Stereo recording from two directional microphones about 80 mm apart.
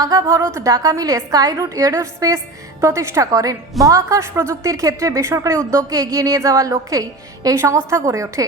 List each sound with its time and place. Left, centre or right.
0.0 s a woman's voice: right
0.7 s a woman's voice: right
3.2 s a woman's voice: right
7.5 s a woman's voice: right